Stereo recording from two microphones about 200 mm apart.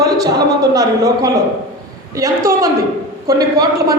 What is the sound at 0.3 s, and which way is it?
A man's voice, 20° right (ahead or behind).